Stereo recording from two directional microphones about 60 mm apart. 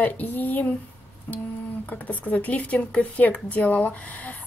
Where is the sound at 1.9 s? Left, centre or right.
Left.